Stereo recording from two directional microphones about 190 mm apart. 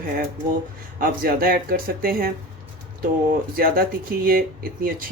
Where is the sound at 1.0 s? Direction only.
50° right (ahead or behind).